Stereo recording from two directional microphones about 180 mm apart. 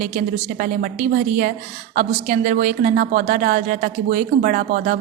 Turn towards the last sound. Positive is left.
turn(degrees=-55)  # may be behind; listen again after turning